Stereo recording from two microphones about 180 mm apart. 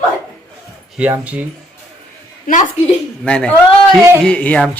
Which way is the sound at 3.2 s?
5° left (ahead or behind).